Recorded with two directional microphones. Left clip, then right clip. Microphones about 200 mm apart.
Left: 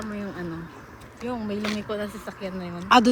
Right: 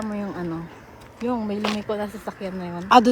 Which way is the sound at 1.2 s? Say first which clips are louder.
Right 4 dB; 45° right (ahead or behind).